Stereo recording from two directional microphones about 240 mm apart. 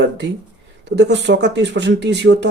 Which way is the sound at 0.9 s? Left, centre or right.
Right.